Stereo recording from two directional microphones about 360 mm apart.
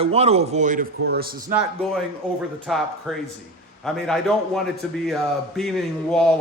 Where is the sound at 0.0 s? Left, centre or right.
Centre.